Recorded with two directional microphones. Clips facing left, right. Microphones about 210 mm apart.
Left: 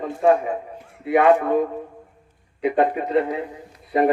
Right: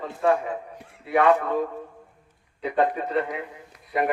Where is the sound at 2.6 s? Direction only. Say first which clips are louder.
Left 4 dB; 15° left (ahead or behind).